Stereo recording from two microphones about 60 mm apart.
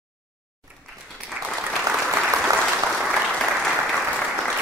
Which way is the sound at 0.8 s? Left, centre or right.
Centre.